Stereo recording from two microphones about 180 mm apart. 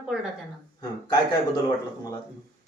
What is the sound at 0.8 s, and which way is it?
Speech, 20° left (ahead or behind).